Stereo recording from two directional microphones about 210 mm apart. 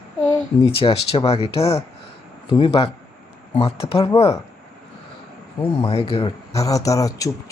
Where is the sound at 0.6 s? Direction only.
25° left (ahead or behind).